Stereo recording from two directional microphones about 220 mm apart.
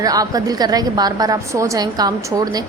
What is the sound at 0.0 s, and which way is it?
A woman's voice, 15° right (ahead or behind).